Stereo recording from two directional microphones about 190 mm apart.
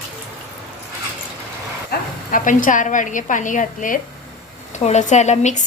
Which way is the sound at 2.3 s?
45° left (ahead or behind).